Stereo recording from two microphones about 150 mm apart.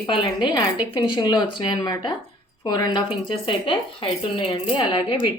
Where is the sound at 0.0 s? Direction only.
35° left (ahead or behind).